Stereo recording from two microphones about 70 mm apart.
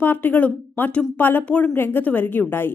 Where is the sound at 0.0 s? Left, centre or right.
Left.